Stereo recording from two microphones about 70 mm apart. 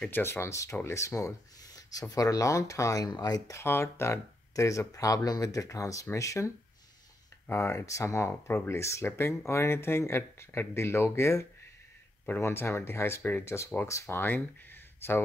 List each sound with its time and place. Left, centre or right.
0.1 s speech: left
3.1 s speech: left
3.5 s speech: left
7.4 s speech: left
13.8 s speech: left
14.1 s speech: left